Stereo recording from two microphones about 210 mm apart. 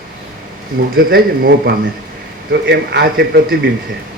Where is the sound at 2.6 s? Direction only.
55° right (ahead or behind).